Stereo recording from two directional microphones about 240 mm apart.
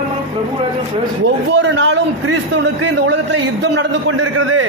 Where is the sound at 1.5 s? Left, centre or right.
Right.